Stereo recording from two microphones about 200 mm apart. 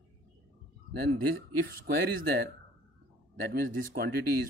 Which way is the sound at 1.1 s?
45° right (ahead or behind).